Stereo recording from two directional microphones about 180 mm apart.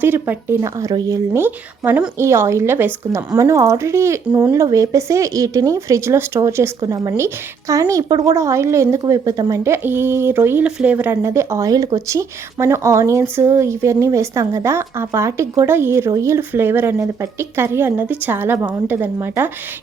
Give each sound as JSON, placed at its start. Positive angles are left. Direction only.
{"t": 0.0, "sound": "a woman's voice", "side_deg": -10}